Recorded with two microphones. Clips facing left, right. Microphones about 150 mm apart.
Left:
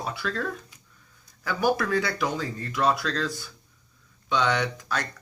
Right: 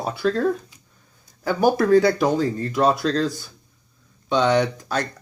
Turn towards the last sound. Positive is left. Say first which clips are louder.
# right 7 dB
turn(degrees=-35)  # may be behind; listen again after turning